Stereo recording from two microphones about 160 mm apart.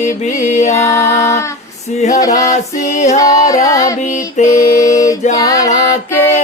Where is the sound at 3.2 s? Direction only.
20° left (ahead or behind).